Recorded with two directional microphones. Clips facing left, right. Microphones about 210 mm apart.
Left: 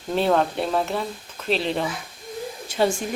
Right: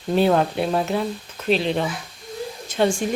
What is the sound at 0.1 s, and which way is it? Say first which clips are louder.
Speech: right 3 dB; 5° right (ahead or behind).